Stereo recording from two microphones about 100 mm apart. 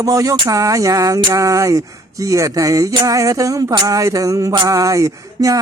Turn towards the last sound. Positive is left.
turn(degrees=-35)  # may be behind; listen again after turning